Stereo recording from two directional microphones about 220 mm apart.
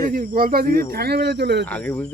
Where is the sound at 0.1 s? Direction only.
40° right (ahead or behind).